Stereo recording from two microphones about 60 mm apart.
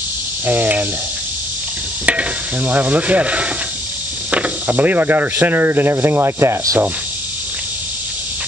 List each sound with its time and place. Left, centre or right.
0.5 s speech: right
2.0 s stir: right
4.3 s speech: right